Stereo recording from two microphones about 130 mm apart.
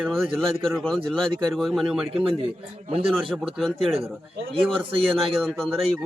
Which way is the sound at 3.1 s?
Centre (ahead or behind).